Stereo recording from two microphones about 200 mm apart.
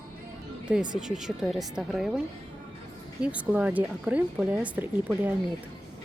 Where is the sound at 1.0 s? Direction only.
5° right (ahead or behind).